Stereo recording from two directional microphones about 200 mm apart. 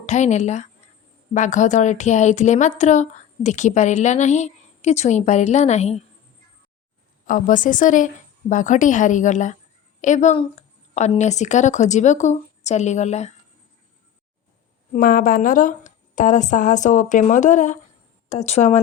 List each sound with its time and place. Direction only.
0.0 s speech: 35° left (ahead or behind)
7.3 s speech: 40° left (ahead or behind)
14.9 s speech: 45° left (ahead or behind)